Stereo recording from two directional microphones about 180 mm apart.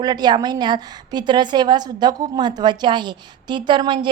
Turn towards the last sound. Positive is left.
turn(degrees=-25)  # may be behind; listen again after turning